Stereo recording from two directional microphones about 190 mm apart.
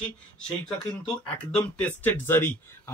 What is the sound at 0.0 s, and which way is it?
Speech, 5° left (ahead or behind).